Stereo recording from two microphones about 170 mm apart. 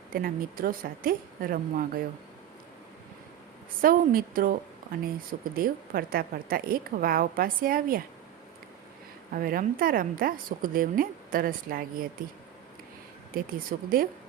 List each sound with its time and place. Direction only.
0.1 s a woman's voice: 60° right (ahead or behind)
3.8 s a woman's voice: 55° right (ahead or behind)
9.3 s a woman's voice: 55° right (ahead or behind)
13.3 s a woman's voice: 55° right (ahead or behind)